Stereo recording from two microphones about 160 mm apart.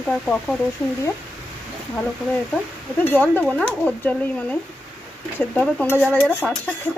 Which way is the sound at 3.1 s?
10° left (ahead or behind).